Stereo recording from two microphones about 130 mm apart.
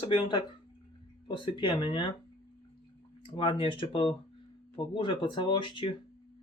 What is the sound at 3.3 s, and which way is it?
Speech, 40° left (ahead or behind).